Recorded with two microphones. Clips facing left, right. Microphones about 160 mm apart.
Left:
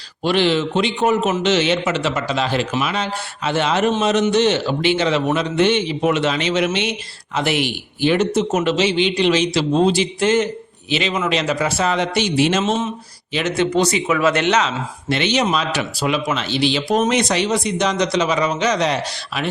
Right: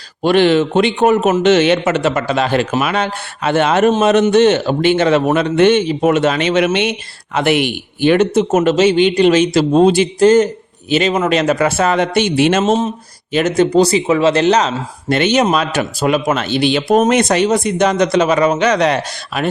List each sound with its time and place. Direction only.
0.2 s a man's voice: 55° right (ahead or behind)
10.2 s speech: 40° right (ahead or behind); by 12.6 s 60° right (ahead or behind)
12.6 s speech: 40° right (ahead or behind)
15.1 s speech: 50° right (ahead or behind)